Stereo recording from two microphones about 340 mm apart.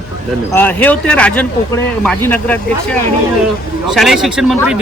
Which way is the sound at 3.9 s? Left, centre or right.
Centre.